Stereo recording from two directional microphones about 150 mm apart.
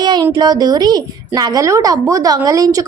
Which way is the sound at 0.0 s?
30° right (ahead or behind).